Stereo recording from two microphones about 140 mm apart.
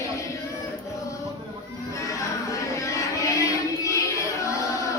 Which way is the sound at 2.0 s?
20° left (ahead or behind).